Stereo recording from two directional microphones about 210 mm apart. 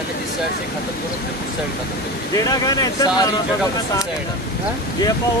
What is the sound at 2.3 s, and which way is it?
Speech, 15° left (ahead or behind).